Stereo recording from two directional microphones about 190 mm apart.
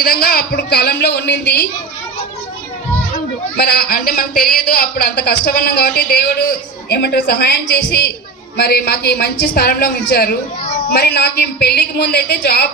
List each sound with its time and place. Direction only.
0.0 s a man's voice: 55° left (ahead or behind)
3.5 s a man's voice: 55° left (ahead or behind)